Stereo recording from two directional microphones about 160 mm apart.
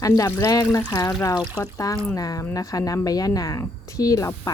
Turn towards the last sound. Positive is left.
turn(degrees=20)  # may be behind; listen again after turning